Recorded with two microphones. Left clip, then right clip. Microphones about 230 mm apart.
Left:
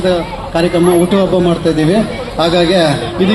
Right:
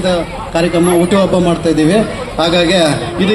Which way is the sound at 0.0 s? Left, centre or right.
Right.